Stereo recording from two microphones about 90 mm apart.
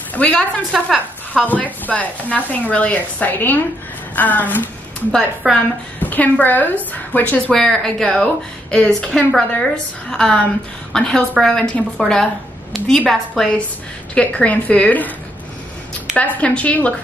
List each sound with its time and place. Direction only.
0.1 s a woman's voice: 15° left (ahead or behind)
5.4 s a woman's voice: 5° right (ahead or behind)
5.9 s a woman's voice: 20° left (ahead or behind)
7.5 s a woman's voice: 5° left (ahead or behind)
16.2 s speech: 15° left (ahead or behind)